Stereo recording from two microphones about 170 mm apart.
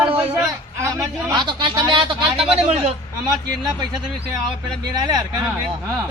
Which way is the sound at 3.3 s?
25° right (ahead or behind).